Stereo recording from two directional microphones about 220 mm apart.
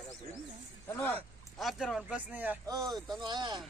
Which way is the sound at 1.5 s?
Centre (ahead or behind).